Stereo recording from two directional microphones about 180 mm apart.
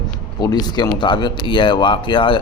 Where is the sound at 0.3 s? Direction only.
20° left (ahead or behind).